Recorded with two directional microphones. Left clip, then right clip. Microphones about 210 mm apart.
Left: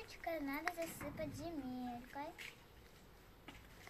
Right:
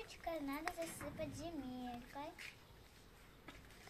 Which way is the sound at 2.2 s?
Centre (ahead or behind).